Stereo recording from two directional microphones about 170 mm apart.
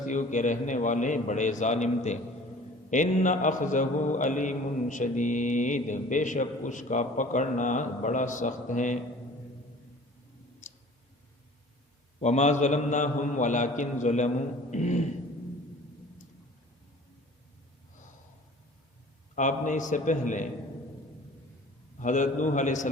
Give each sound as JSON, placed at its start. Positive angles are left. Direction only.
{"t": 0.0, "sound": "a man's voice", "side_deg": 45}
{"t": 10.6, "sound": "clicking", "side_deg": 45}
{"t": 12.2, "sound": "a man's voice", "side_deg": 45}
{"t": 19.4, "sound": "a man's voice", "side_deg": 45}
{"t": 21.9, "sound": "a man's voice", "side_deg": 45}